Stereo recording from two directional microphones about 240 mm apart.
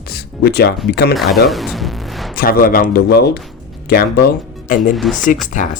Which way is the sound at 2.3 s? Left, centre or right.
Left.